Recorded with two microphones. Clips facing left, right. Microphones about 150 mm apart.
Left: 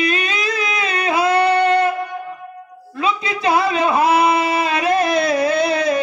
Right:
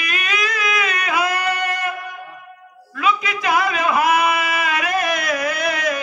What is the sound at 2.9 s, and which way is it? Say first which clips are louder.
A man's voice: even; 30° left (ahead or behind).